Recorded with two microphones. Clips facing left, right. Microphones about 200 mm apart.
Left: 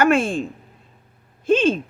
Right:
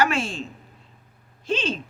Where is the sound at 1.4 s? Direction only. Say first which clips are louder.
Left 9 dB; 50° left (ahead or behind).